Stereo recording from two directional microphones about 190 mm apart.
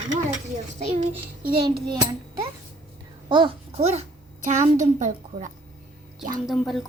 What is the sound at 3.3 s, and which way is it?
A child's voice, 30° right (ahead or behind).